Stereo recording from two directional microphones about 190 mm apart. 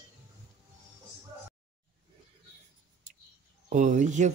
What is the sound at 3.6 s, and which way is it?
Speech, 40° right (ahead or behind).